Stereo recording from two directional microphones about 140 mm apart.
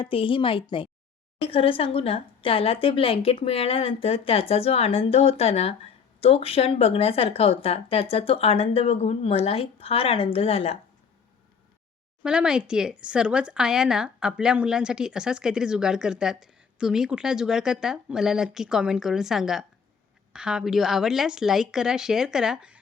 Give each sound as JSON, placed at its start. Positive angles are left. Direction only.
{"t": 0.0, "sound": "a woman's voice", "side_deg": 40}
{"t": 12.2, "sound": "speech", "side_deg": -5}